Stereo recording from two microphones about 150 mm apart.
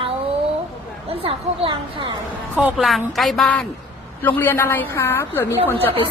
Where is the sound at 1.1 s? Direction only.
40° right (ahead or behind).